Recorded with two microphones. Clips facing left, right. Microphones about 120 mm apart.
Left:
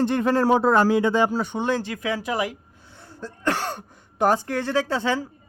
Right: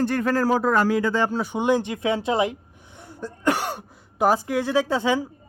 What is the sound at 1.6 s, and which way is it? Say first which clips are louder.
Speech: right 3 dB; 15° right (ahead or behind).